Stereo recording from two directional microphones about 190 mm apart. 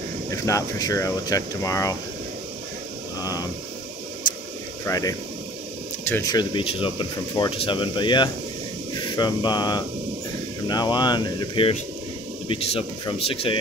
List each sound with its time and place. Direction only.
0.3 s speech: 15° left (ahead or behind)
3.2 s speech: 20° left (ahead or behind)
4.8 s speech: 20° left (ahead or behind)